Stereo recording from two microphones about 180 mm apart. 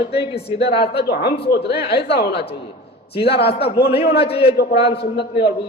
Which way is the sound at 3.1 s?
30° left (ahead or behind).